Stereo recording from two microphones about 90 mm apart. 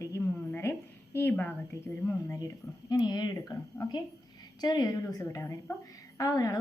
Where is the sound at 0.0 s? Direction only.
30° left (ahead or behind).